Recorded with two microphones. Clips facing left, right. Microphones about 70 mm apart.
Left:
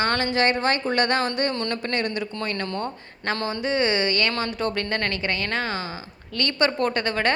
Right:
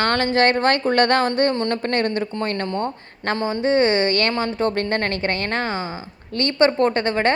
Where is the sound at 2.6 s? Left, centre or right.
Right.